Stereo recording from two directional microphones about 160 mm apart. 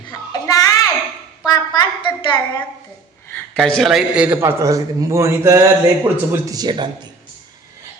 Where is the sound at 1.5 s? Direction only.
25° left (ahead or behind).